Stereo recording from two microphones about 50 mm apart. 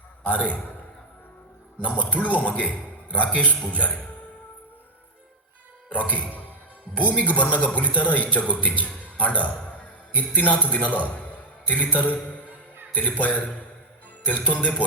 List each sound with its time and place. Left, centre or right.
0.3 s music: left
2.0 s speech: left
3.2 s music: left
3.7 s a man's voice: left
5.9 s a man's voice: left
14.4 s music: left